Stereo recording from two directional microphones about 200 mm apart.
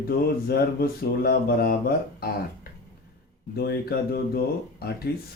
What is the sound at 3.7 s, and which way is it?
Speech, 50° left (ahead or behind).